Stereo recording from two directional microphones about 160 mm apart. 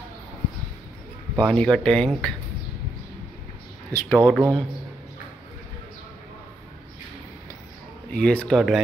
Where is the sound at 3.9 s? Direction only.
15° left (ahead or behind).